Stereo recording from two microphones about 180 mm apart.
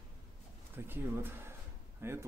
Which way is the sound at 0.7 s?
10° right (ahead or behind).